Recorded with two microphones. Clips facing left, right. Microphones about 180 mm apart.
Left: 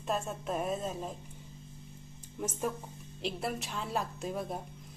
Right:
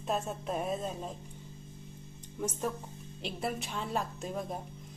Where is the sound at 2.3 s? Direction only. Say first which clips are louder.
Even; 10° left (ahead or behind).